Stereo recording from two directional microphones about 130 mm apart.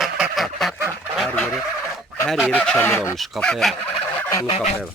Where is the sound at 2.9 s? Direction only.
20° left (ahead or behind).